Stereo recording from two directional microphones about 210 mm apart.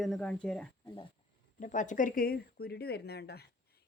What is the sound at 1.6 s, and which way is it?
A woman's voice, 35° left (ahead or behind).